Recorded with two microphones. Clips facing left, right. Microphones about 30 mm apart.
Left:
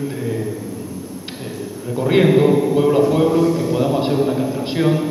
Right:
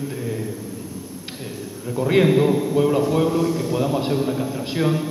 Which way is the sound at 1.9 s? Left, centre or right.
Centre.